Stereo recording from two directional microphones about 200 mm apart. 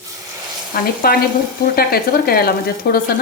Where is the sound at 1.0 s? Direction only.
50° left (ahead or behind).